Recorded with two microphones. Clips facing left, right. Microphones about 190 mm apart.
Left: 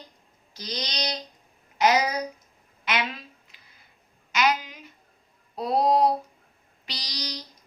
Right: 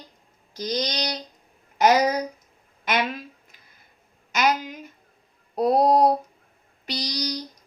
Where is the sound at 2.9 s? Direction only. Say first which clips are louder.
Right 4 dB; 50° right (ahead or behind).